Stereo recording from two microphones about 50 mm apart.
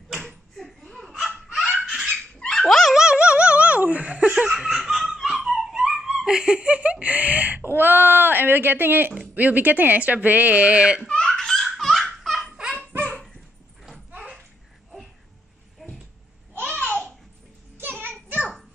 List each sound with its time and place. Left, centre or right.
0.2 s slap: centre
1.8 s laughter: centre
2.3 s dog: centre
2.7 s dog: centre
3.0 s laughter: centre
7.7 s a sound: right
9.3 s speech: right
11.1 s baby laughter: centre
11.8 s laughter: centre
15.8 s a sound: centre
16.6 s a sound: left